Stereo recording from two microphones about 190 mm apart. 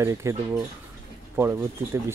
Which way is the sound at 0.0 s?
15° right (ahead or behind).